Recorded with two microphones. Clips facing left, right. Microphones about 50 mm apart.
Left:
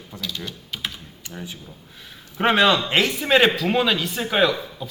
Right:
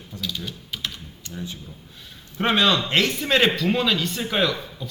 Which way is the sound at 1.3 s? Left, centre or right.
Left.